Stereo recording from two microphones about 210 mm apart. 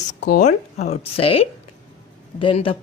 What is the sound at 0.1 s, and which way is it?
A woman's voice, 35° left (ahead or behind).